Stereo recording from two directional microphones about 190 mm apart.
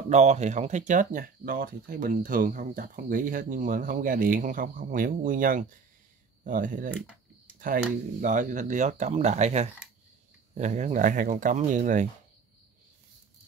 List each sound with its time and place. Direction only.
0.1 s speech: 35° right (ahead or behind)